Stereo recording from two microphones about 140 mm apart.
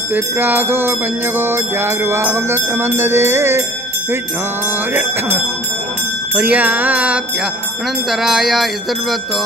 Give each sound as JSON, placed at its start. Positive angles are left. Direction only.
{"t": 0.1, "sound": "music", "side_deg": -15}
{"t": 6.3, "sound": "music", "side_deg": -10}